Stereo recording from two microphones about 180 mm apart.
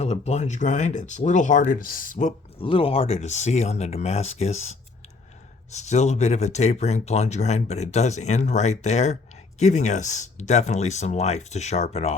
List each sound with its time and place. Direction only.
0.0 s speech: 35° left (ahead or behind)
2.6 s speech: 30° left (ahead or behind)